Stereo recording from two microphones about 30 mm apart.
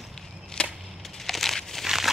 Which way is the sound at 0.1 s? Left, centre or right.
Centre.